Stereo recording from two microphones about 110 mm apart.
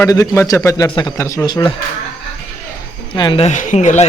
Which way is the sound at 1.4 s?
40° left (ahead or behind).